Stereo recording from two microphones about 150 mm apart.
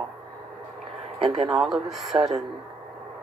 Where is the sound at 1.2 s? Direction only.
40° right (ahead or behind).